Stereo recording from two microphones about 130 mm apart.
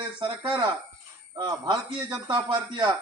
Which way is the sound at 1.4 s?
30° right (ahead or behind).